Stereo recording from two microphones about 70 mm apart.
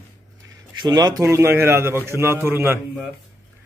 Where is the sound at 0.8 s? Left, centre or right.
Right.